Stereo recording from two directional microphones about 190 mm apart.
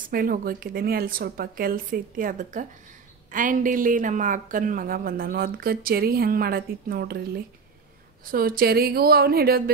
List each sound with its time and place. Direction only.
0.1 s a woman's voice: 50° right (ahead or behind)